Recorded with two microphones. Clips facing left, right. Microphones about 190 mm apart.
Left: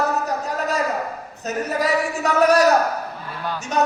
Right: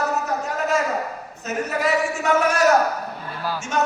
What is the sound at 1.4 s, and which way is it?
A man's voice, 35° left (ahead or behind).